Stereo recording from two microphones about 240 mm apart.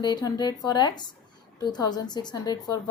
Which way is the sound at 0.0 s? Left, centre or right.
Centre.